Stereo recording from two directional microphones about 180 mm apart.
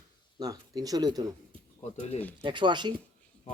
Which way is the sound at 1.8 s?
40° left (ahead or behind).